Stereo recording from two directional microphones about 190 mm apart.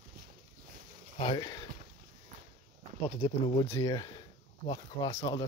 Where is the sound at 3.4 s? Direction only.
20° left (ahead or behind).